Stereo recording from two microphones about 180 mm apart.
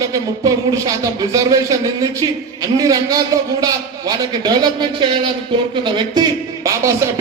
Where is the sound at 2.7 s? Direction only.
20° right (ahead or behind).